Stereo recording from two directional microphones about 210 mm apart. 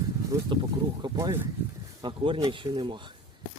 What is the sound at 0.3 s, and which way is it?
Speech, 20° right (ahead or behind).